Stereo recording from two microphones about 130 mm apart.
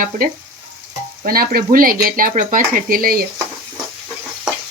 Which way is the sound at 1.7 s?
90° right.